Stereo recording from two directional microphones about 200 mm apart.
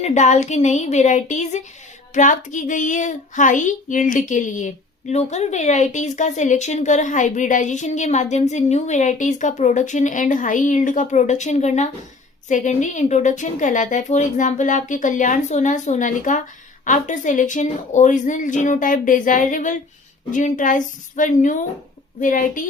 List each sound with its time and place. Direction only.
0.0 s speech: 35° left (ahead or behind)